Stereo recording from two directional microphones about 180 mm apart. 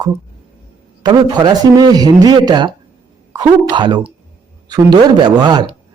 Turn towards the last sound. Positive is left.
turn(degrees=-25)  # may be behind; listen again after turning